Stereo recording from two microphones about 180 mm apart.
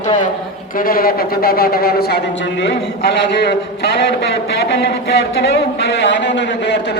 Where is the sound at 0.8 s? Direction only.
55° left (ahead or behind); by 2.7 s 85° left.